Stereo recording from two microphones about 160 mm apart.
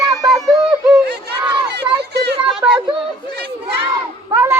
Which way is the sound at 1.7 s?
90° right.